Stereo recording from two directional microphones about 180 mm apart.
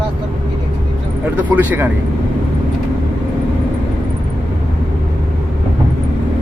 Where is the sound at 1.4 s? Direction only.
10° right (ahead or behind).